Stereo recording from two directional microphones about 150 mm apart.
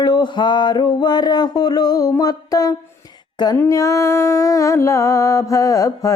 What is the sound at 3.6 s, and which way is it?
Music, 20° left (ahead or behind).